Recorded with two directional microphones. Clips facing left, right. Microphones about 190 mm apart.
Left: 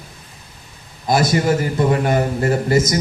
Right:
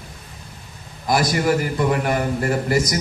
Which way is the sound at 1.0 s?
25° left (ahead or behind).